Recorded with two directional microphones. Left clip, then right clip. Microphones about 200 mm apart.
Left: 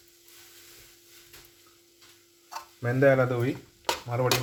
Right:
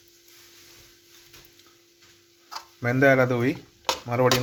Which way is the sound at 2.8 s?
30° right (ahead or behind).